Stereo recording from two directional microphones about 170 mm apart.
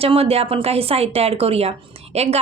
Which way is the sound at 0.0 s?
35° right (ahead or behind).